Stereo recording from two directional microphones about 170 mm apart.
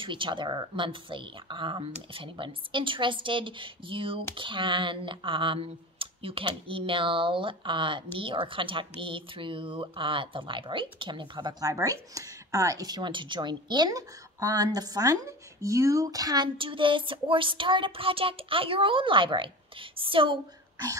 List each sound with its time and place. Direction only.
0.0 s speech: 30° right (ahead or behind)